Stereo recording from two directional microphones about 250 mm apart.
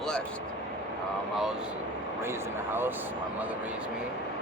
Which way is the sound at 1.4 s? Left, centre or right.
Centre.